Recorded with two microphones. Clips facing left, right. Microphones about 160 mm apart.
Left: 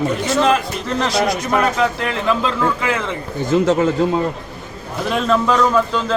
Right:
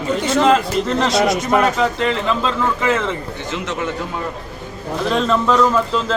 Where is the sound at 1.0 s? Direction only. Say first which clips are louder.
Left 1 dB; centre (ahead or behind).